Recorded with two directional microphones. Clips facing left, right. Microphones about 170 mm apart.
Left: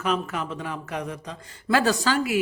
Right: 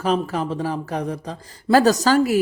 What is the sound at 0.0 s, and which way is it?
Speech, 35° right (ahead or behind).